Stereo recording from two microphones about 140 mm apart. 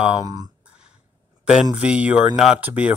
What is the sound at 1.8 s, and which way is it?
Speech, 10° right (ahead or behind).